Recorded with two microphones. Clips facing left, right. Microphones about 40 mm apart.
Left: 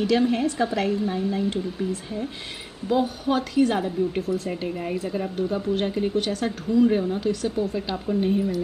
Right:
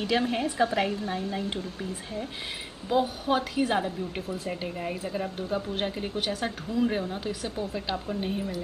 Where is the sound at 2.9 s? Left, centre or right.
Centre.